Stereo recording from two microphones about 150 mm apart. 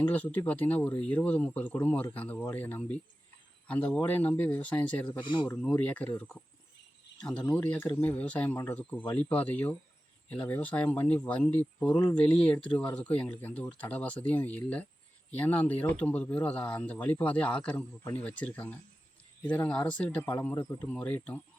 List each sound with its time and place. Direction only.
0.1 s speech: 10° left (ahead or behind)
5.2 s speech: 30° left (ahead or behind)
5.5 s speech: 10° left (ahead or behind)